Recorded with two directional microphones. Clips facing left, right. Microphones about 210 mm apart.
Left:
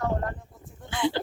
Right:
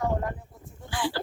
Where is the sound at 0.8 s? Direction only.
20° left (ahead or behind).